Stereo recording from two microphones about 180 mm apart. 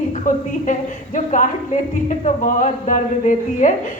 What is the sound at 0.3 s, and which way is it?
A woman's voice, 45° left (ahead or behind).